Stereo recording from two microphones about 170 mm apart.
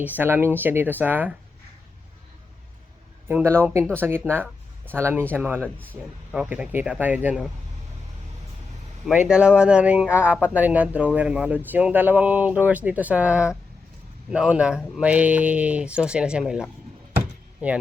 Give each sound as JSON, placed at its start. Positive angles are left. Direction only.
{"t": 0.0, "sound": "speech", "side_deg": -10}
{"t": 3.2, "sound": "speech", "side_deg": -15}
{"t": 9.0, "sound": "speech", "side_deg": -5}
{"t": 17.2, "sound": "a sound", "side_deg": -10}